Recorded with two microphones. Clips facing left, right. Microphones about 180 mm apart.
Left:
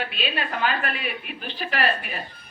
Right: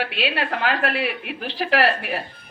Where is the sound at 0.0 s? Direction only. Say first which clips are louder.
Right 4 dB; 80° right.